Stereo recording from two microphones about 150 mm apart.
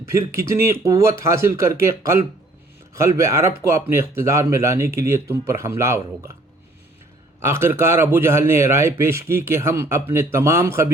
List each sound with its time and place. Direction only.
0.0 s speech: 20° right (ahead or behind)
7.3 s a man's voice: 15° right (ahead or behind)